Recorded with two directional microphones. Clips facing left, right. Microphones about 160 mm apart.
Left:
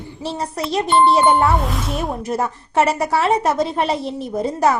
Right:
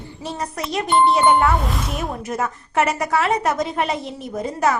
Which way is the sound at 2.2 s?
30° left (ahead or behind).